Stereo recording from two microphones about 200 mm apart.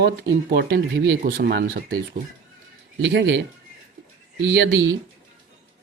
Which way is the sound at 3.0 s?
65° right (ahead or behind).